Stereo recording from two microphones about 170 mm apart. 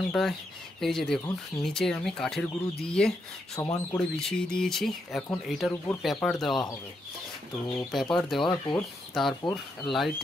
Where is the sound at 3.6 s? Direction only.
15° left (ahead or behind).